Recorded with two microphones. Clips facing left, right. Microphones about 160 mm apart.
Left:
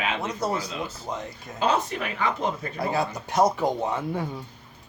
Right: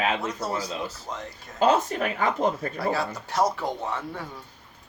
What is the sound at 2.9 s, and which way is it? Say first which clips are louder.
Speech: left 1 dB; 15° left (ahead or behind).